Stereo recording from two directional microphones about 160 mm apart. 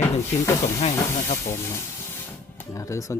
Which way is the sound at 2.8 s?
20° left (ahead or behind).